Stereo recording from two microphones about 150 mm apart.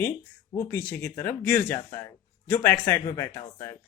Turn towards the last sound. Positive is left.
turn(degrees=20)  # may be behind; listen again after turning